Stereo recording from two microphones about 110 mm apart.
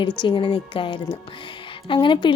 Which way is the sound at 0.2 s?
50° left (ahead or behind).